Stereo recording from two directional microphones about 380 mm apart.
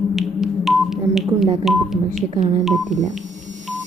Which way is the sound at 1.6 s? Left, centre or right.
Centre.